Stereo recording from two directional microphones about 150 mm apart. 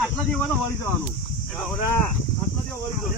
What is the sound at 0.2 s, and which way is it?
Speech, 5° left (ahead or behind).